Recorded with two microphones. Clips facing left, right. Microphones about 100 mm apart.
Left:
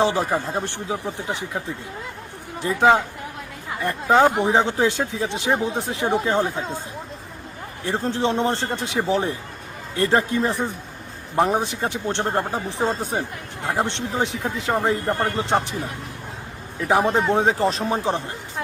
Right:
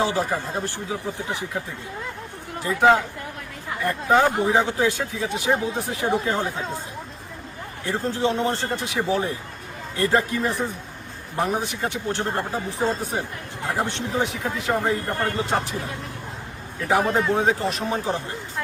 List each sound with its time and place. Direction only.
0.0 s speech: 25° left (ahead or behind)
2.6 s speech: 25° left (ahead or behind)
4.0 s speech: 25° left (ahead or behind)
7.9 s speech: 30° left (ahead or behind)
16.9 s speech: 25° left (ahead or behind)